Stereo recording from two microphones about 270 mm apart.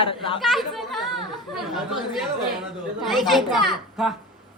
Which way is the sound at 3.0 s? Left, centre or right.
Centre.